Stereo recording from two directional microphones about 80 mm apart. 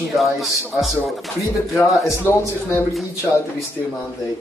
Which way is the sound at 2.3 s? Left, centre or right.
Left.